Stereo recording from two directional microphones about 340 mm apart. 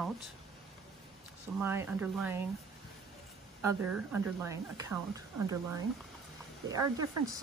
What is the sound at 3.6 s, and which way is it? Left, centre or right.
A woman's voice, centre.